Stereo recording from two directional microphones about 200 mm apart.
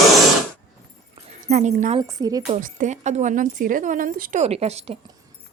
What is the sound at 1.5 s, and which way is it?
Speech, 40° right (ahead or behind).